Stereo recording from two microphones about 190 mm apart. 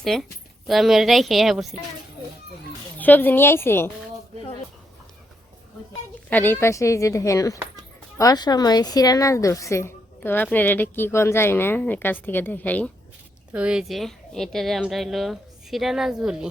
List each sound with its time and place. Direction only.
0.0 s a woman's voice: centre (ahead or behind)
3.0 s a woman's voice: 10° left (ahead or behind)
6.3 s a woman's voice: 10° left (ahead or behind)
13.5 s a woman's voice: 5° right (ahead or behind)